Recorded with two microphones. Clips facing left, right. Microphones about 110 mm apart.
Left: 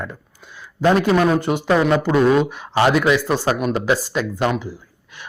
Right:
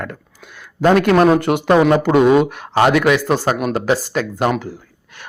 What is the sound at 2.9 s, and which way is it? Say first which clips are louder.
Speech: right 2 dB; 65° right (ahead or behind).